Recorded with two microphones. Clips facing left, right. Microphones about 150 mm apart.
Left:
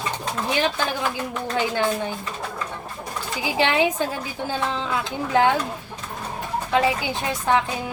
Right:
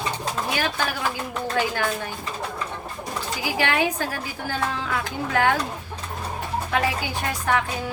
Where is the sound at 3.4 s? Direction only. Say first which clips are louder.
Left 3 dB; 25° left (ahead or behind).